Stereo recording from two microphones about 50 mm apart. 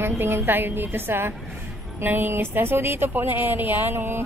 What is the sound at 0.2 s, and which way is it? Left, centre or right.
A woman's voice, right.